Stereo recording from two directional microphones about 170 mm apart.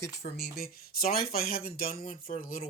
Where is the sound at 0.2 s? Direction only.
70° left (ahead or behind).